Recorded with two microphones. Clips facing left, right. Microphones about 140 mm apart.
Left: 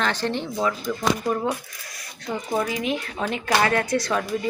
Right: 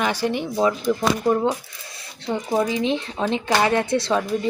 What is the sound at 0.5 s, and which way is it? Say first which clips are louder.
Speech: right 5 dB; 25° right (ahead or behind).